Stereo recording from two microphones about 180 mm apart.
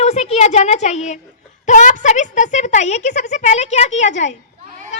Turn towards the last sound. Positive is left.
turn(degrees=40)  # may be behind; listen again after turning